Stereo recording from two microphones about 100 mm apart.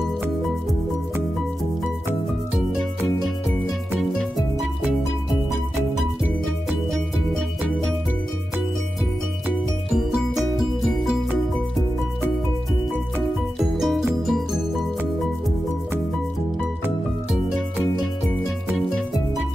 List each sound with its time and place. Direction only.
6.4 s music: 5° left (ahead or behind)
9.9 s music: 5° right (ahead or behind)
13.6 s music: centre (ahead or behind)
18.9 s music: centre (ahead or behind)